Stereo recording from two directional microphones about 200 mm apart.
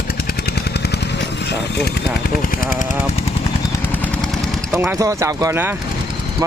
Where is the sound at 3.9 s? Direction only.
5° left (ahead or behind).